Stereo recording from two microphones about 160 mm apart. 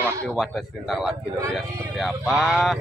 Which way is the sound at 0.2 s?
Centre (ahead or behind).